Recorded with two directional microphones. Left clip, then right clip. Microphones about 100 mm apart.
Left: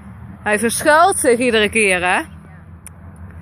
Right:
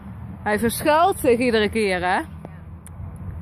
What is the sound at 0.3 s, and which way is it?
Speech, centre (ahead or behind).